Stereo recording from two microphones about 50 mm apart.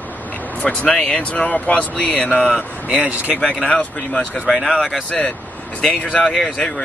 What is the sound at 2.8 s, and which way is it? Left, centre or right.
Speech, right.